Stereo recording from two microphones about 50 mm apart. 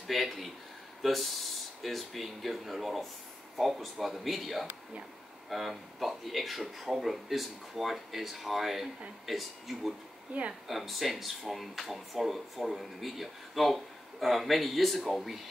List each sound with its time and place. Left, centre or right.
0.0 s speech: centre
10.3 s speech: right
10.7 s speech: centre